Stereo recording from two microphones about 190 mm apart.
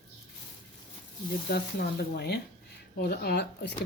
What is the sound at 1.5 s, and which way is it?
Speech, 60° left (ahead or behind).